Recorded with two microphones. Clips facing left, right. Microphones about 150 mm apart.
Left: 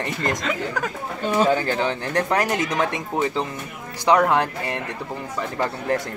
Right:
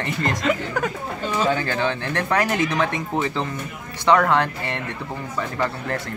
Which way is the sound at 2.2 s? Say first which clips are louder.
Right 2 dB; 20° left (ahead or behind).